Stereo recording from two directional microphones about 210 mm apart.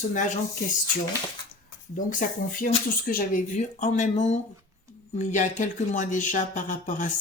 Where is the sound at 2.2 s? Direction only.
40° left (ahead or behind).